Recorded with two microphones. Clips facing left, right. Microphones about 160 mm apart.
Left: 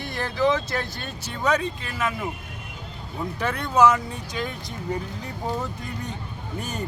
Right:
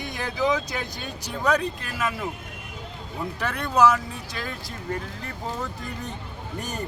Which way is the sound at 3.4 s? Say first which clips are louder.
Left 2 dB; 5° left (ahead or behind).